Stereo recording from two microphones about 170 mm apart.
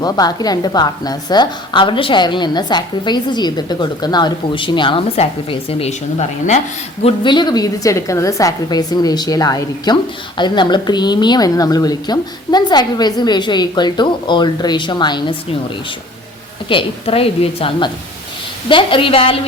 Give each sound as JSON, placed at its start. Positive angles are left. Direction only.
{"t": 0.0, "sound": "a woman's voice", "side_deg": 25}
{"t": 7.0, "sound": "a woman's voice", "side_deg": 25}
{"t": 16.6, "sound": "a woman's voice", "side_deg": 30}